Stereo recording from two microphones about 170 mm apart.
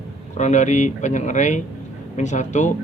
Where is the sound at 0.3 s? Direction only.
45° left (ahead or behind).